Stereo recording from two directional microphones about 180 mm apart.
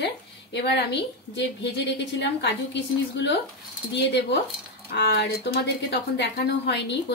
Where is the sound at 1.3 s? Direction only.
75° left (ahead or behind).